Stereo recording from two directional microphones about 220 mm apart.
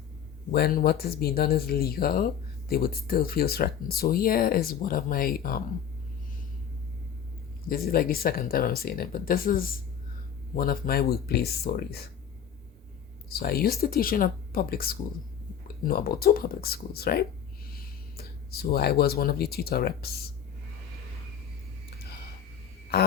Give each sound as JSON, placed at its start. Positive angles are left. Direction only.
{"t": 0.5, "sound": "speech", "side_deg": 45}
{"t": 7.7, "sound": "speech", "side_deg": 40}
{"t": 13.3, "sound": "speech", "side_deg": 45}
{"t": 22.9, "sound": "a sound", "side_deg": 45}